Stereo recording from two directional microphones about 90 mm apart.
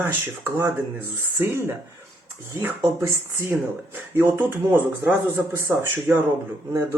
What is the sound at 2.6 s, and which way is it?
Speech, 25° right (ahead or behind).